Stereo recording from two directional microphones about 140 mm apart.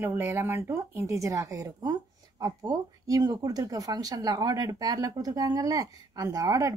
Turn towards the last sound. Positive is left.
turn(degrees=-25)  # may be behind; listen again after turning